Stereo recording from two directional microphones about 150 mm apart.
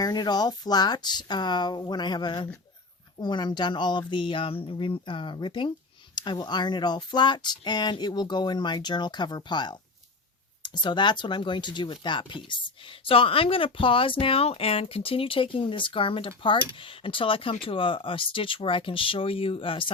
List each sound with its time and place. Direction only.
0.0 s speech: 25° left (ahead or behind)